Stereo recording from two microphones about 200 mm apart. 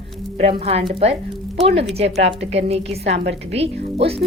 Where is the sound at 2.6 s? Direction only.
30° right (ahead or behind).